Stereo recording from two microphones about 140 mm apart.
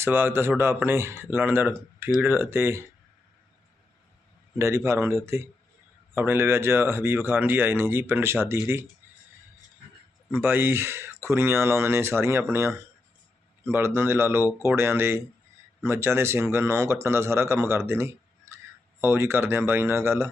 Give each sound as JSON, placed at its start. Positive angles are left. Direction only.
{"t": 0.0, "sound": "speech", "side_deg": -15}
{"t": 4.5, "sound": "speech", "side_deg": -20}
{"t": 10.3, "sound": "speech", "side_deg": -15}